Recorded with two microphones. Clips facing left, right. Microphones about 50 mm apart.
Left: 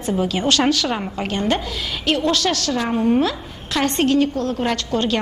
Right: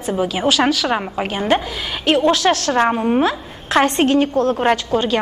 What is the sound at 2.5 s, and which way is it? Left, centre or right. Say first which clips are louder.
Speech: right 6 dB; right.